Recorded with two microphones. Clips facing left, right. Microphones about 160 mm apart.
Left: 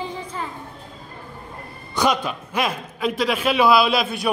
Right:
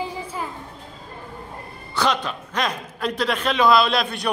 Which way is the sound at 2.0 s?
10° left (ahead or behind).